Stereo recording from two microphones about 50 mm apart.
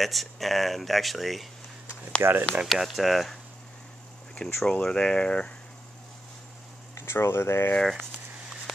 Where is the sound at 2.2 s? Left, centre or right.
Right.